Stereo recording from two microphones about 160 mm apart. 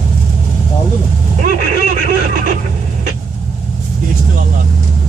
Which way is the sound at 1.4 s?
55° right (ahead or behind).